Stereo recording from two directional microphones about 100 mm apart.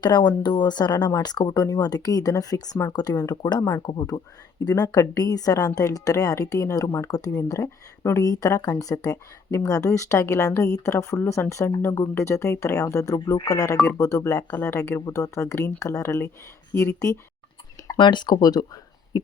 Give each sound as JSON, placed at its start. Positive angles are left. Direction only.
{"t": 0.0, "sound": "speech", "side_deg": 45}
{"t": 17.9, "sound": "speech", "side_deg": 50}